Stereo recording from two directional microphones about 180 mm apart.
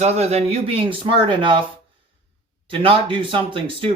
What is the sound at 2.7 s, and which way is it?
Speech, 30° right (ahead or behind).